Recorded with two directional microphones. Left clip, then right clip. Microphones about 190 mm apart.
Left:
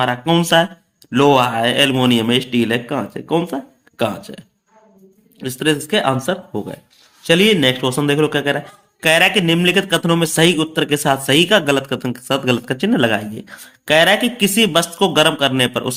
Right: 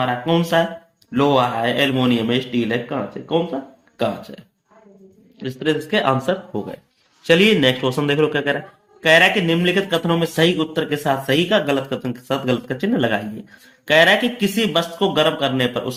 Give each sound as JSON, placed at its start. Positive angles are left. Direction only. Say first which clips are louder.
{"t": 0.0, "sound": "a man's voice", "louder": "left 3 dB", "side_deg": 40}